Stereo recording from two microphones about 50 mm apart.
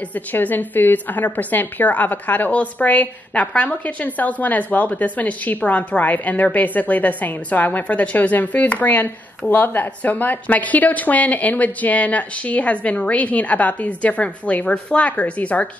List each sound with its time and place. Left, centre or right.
0.1 s a woman's voice: left